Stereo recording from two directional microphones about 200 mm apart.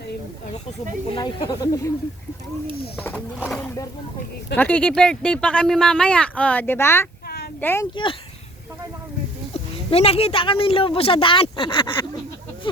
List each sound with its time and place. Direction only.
1.1 s speech: 20° left (ahead or behind)
4.5 s speech: 10° left (ahead or behind)
9.5 s speech: 30° left (ahead or behind)